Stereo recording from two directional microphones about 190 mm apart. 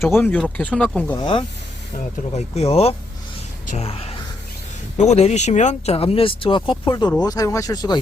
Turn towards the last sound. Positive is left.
turn(degrees=20)  # may be behind; listen again after turning